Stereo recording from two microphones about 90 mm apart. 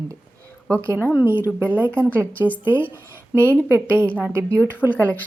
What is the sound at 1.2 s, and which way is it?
A woman's voice, 25° right (ahead or behind).